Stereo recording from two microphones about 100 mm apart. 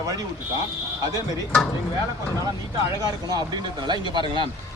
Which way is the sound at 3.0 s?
40° right (ahead or behind).